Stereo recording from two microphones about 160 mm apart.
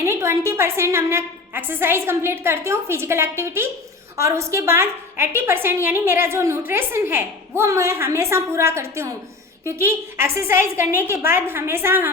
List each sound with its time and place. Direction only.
0.0 s a woman's voice: 15° right (ahead or behind)